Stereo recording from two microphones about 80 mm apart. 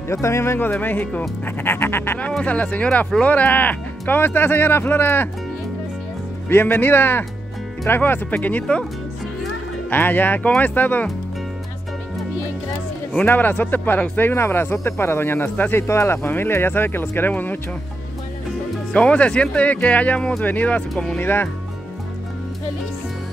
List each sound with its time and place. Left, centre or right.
0.1 s speech: left
2.4 s speech: centre
6.5 s speech: left
9.8 s speech: left
13.2 s speech: left
18.9 s speech: centre
20.9 s speech: centre
21.2 s speech: left